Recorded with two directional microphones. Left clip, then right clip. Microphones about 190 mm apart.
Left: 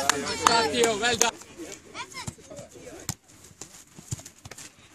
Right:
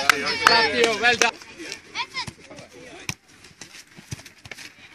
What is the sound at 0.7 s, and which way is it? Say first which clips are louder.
Speech: right 5 dB; 30° left (ahead or behind).